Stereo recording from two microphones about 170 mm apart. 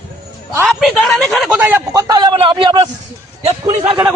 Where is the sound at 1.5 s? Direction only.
10° right (ahead or behind); by 3.9 s 40° right (ahead or behind).